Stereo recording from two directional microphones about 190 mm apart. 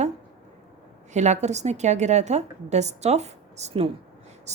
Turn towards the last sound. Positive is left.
turn(degrees=-35)  # may be behind; listen again after turning